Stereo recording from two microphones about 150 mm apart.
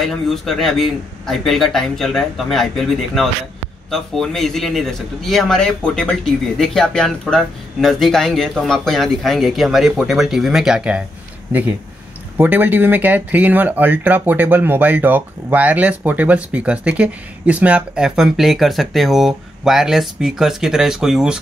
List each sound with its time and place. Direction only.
0.0 s speech: centre (ahead or behind)